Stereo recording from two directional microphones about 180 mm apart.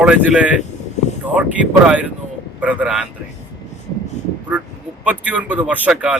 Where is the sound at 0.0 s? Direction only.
5° right (ahead or behind).